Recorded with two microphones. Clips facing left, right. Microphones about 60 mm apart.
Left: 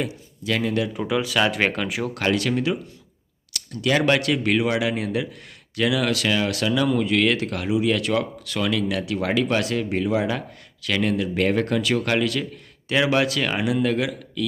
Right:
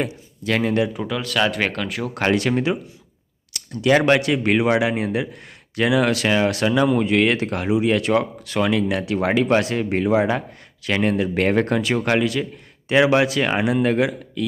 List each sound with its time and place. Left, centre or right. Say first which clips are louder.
0.0 s speech: right 3 dB; right
1.0 s speech: even; centre
2.1 s speech: right 4 dB; right
3.5 s speech: right 5 dB; right